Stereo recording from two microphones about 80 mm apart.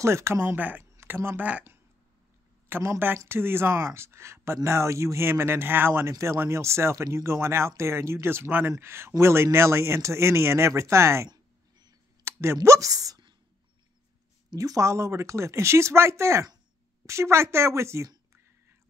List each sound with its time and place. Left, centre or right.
0.0 s speech: right
2.7 s speech: right
12.3 s a sound: right
12.6 s speech: right
14.6 s speech: right